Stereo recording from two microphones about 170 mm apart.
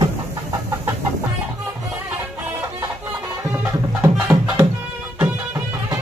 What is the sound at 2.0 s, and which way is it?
Music, 10° right (ahead or behind).